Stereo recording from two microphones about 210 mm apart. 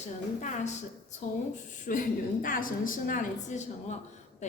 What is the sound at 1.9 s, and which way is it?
A woman's voice, 40° left (ahead or behind).